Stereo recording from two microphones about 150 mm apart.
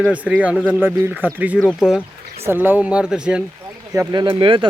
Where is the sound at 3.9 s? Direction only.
30° right (ahead or behind).